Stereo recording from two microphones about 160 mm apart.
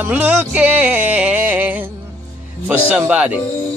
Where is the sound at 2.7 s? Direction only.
10° right (ahead or behind).